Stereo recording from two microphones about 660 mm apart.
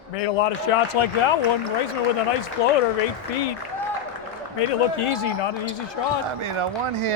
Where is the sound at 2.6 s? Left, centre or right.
Left.